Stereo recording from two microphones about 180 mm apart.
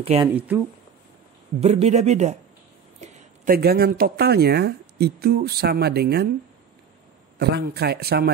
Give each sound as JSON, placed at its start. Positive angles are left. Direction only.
{"t": 0.0, "sound": "a man's voice", "side_deg": -35}
{"t": 1.6, "sound": "a man's voice", "side_deg": -35}
{"t": 3.0, "sound": "a sound", "side_deg": -40}
{"t": 3.5, "sound": "speech", "side_deg": -60}
{"t": 7.3, "sound": "speech", "side_deg": -60}